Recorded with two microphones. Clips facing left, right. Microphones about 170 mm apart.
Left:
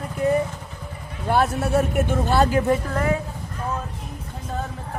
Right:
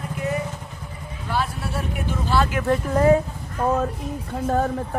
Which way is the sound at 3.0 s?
35° right (ahead or behind).